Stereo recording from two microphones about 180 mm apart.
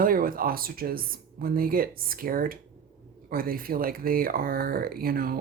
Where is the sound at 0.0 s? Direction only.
50° right (ahead or behind).